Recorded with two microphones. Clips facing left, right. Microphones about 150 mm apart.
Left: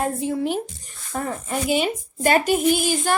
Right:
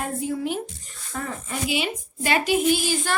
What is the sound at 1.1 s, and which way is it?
A woman's voice, 45° left (ahead or behind).